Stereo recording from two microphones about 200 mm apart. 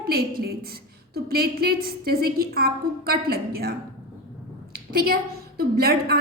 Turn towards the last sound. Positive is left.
turn(degrees=-50)  # may be behind; listen again after turning